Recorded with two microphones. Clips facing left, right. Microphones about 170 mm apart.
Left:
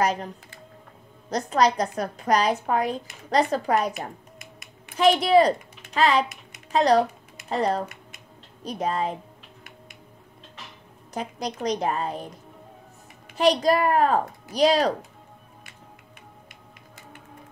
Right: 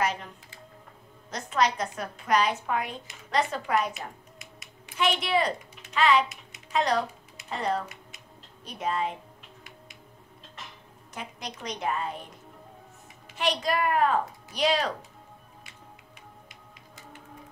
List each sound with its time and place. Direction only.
0.0 s a woman's voice: 40° left (ahead or behind)
1.3 s a woman's voice: 35° left (ahead or behind)
4.4 s finger snapping: 55° left (ahead or behind)
4.9 s a woman's voice: 35° left (ahead or behind)
7.8 s typing: 55° left (ahead or behind)
8.6 s a woman's voice: 35° left (ahead or behind)
11.1 s a woman's voice: 35° left (ahead or behind)
13.4 s a woman's voice: 35° left (ahead or behind)